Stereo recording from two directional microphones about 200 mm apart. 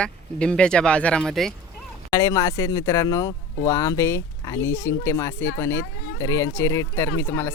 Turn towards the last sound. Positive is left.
turn(degrees=10)  # may be behind; listen again after turning